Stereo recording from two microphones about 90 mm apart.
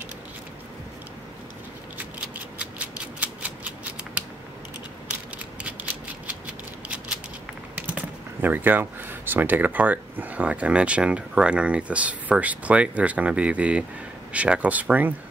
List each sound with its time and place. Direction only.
2.0 s scissors: 20° right (ahead or behind)
6.2 s scissors: 15° right (ahead or behind)
7.7 s speech: 20° right (ahead or behind)